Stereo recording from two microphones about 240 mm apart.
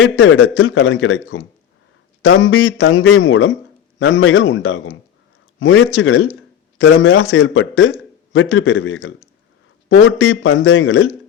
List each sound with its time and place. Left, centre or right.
0.0 s a man's voice: left